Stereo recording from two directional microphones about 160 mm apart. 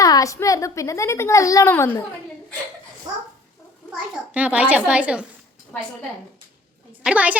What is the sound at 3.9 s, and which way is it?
A child's voice, 10° right (ahead or behind).